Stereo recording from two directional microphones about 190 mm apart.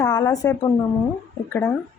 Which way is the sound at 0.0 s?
20° left (ahead or behind).